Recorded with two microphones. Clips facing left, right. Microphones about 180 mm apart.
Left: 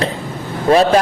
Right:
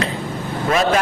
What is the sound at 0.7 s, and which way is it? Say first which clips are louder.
Speech: left 6 dB; 35° left (ahead or behind).